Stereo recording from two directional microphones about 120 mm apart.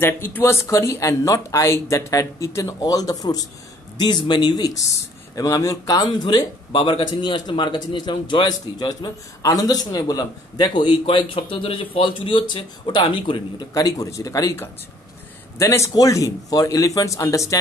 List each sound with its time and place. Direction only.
0.0 s speech: 20° left (ahead or behind); by 13.7 s 40° left (ahead or behind)
13.7 s speech: 30° left (ahead or behind)